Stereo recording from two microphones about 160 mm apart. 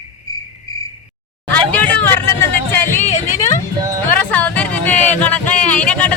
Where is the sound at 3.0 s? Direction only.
45° left (ahead or behind).